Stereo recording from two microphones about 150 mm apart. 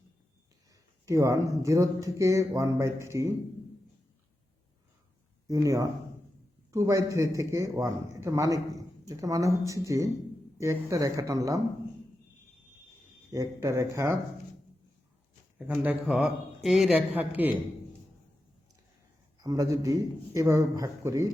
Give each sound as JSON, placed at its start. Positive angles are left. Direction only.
{"t": 1.0, "sound": "a man's voice", "side_deg": -20}
{"t": 5.5, "sound": "a man's voice", "side_deg": -20}
{"t": 13.3, "sound": "a man's voice", "side_deg": -20}
{"t": 15.5, "sound": "a man's voice", "side_deg": -10}
{"t": 19.4, "sound": "a man's voice", "side_deg": -20}